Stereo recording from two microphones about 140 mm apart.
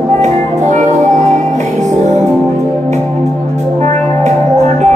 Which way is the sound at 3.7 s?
55° right (ahead or behind).